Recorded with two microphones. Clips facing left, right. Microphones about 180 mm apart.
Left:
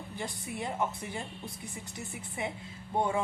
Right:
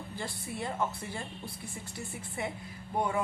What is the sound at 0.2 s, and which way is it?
A woman's voice, 20° left (ahead or behind).